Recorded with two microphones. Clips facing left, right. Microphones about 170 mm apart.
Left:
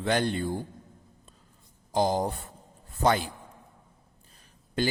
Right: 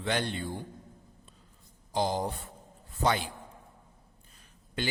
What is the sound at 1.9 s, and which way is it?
Speech, 45° left (ahead or behind).